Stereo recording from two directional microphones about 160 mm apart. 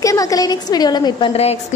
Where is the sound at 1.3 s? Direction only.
40° left (ahead or behind).